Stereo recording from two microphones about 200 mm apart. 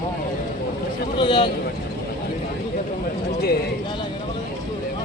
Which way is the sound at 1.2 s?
25° left (ahead or behind).